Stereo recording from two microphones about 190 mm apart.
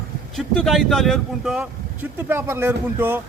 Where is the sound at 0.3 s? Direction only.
Centre (ahead or behind).